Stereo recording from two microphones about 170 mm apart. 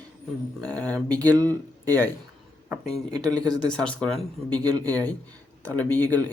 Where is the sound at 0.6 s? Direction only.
10° left (ahead or behind).